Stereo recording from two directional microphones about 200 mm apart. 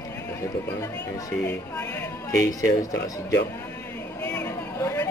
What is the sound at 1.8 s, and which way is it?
Speech, 15° left (ahead or behind).